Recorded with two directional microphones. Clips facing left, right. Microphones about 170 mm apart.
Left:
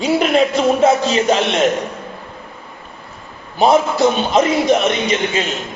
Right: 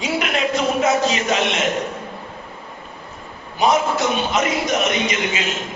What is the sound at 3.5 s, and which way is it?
A man's voice, 30° left (ahead or behind).